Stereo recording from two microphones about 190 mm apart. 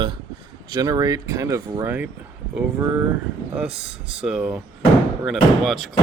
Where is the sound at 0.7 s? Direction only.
20° right (ahead or behind).